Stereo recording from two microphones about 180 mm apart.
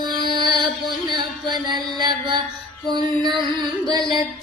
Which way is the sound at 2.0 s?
25° right (ahead or behind).